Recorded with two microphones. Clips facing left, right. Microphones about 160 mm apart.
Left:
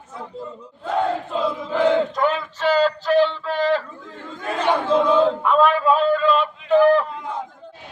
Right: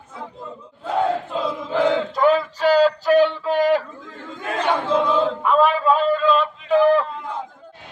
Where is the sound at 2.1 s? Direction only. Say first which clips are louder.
Right 4 dB; 5° right (ahead or behind).